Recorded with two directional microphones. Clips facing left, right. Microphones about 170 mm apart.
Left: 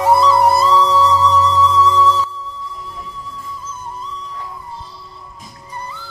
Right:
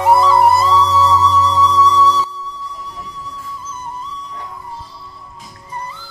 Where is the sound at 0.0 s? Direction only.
35° left (ahead or behind).